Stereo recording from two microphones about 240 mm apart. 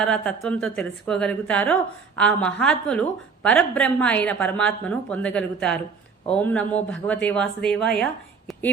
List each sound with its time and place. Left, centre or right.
0.0 s a woman's voice: centre